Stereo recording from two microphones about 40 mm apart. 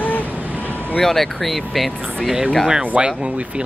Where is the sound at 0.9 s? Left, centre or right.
Centre.